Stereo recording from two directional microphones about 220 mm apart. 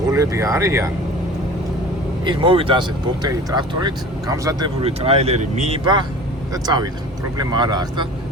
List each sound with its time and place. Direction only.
0.1 s speech: 15° right (ahead or behind)
2.2 s speech: 25° right (ahead or behind)